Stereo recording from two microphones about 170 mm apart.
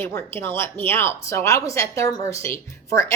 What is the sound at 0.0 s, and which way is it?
Speech, 15° left (ahead or behind).